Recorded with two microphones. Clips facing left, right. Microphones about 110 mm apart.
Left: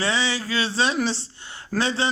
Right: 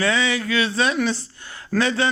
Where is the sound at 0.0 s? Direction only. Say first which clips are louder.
Right 3 dB; 30° left (ahead or behind).